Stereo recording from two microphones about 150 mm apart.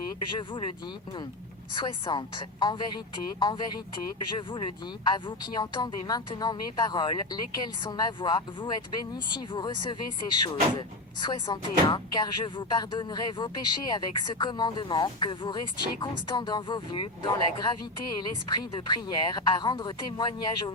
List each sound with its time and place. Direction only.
0.3 s a woman's voice: 35° left (ahead or behind)
1.7 s a woman's voice: 30° left (ahead or behind)